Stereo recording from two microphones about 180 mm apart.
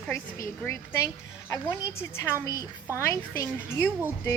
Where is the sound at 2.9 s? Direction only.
15° left (ahead or behind).